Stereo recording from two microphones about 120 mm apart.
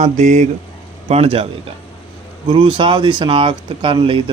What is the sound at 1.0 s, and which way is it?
Speech, 60° right (ahead or behind).